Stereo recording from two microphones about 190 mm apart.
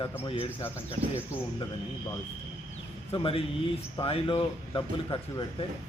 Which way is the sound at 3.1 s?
30° left (ahead or behind).